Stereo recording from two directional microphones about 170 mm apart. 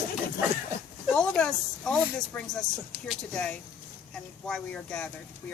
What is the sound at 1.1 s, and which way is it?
Speech, 5° left (ahead or behind).